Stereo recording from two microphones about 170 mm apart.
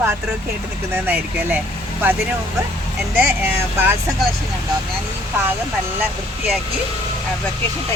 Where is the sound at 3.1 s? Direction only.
10° right (ahead or behind).